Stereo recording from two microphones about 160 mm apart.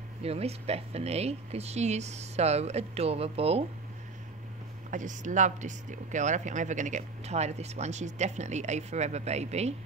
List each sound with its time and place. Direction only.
0.2 s speech: 40° right (ahead or behind)
4.9 s speech: 50° right (ahead or behind)